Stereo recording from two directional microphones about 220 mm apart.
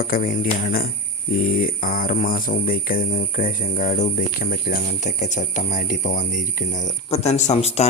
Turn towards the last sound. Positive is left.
turn(degrees=30)  # may be behind; listen again after turning